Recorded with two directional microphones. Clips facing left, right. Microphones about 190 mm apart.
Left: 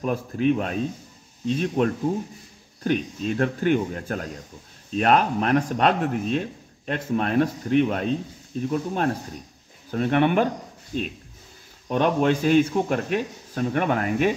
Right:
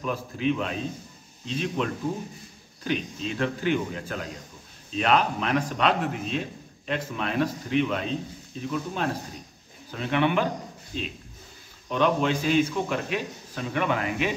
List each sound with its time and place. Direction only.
0.0 s speech: 50° left (ahead or behind)